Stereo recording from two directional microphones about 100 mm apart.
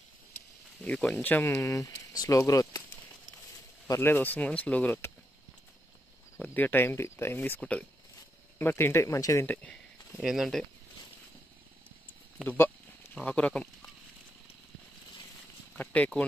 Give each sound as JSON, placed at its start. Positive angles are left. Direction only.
{"t": 0.8, "sound": "speech", "side_deg": 10}
{"t": 1.2, "sound": "speech", "side_deg": 25}
{"t": 3.8, "sound": "speech", "side_deg": 25}
{"t": 6.4, "sound": "speech", "side_deg": 15}
{"t": 9.5, "sound": "a sound", "side_deg": 10}
{"t": 10.2, "sound": "speech", "side_deg": -5}
{"t": 12.4, "sound": "a sound", "side_deg": 25}
{"t": 13.1, "sound": "speech", "side_deg": 15}
{"t": 15.7, "sound": "speech", "side_deg": 15}